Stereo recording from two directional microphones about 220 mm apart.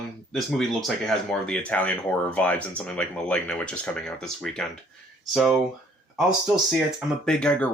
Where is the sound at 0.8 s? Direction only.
Centre (ahead or behind).